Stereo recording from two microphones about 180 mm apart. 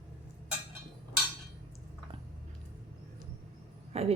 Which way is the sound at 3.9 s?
35° right (ahead or behind).